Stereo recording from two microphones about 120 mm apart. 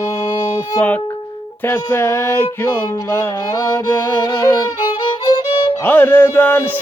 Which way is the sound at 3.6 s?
30° left (ahead or behind).